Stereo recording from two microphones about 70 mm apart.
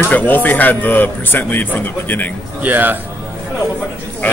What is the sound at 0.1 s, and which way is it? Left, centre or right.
Speech, left.